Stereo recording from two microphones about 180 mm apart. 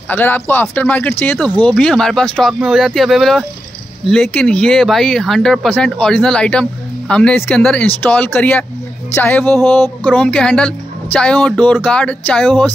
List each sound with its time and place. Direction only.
0.1 s speech: 10° left (ahead or behind)